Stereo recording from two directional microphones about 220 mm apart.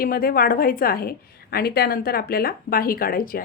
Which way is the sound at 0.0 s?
40° left (ahead or behind).